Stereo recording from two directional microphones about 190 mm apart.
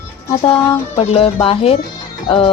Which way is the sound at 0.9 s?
30° left (ahead or behind).